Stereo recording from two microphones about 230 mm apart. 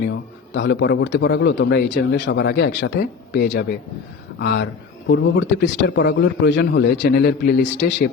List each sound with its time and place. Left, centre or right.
0.0 s a man's voice: left